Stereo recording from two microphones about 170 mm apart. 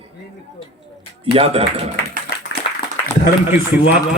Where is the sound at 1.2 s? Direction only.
35° right (ahead or behind).